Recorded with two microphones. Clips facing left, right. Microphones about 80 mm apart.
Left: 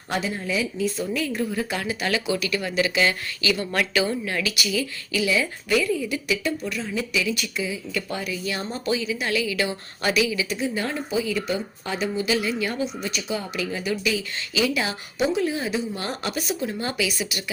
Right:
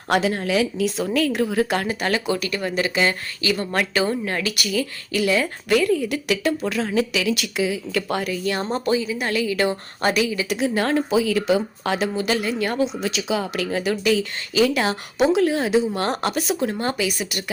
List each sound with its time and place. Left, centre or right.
0.1 s speech: right
1.0 s speech: right
6.9 s speech: right
8.6 s speech: right
8.9 s a woman's voice: right
10.5 s speech: right
12.3 s speech: right
12.8 s speech: right
13.9 s speech: right
16.6 s speech: right